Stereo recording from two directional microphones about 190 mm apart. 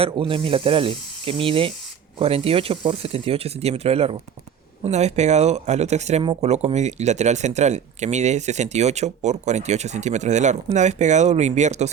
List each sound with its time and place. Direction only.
0.0 s snake: 30° right (ahead or behind)
2.1 s speech: 30° right (ahead or behind)